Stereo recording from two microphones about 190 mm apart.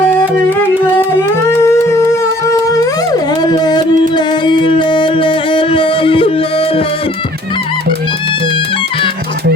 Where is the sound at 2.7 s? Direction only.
20° left (ahead or behind).